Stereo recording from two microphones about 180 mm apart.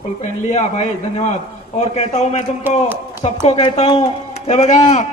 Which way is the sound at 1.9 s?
40° left (ahead or behind).